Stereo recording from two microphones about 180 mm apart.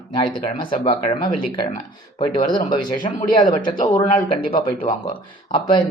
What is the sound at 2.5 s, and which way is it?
A man's voice, 25° left (ahead or behind).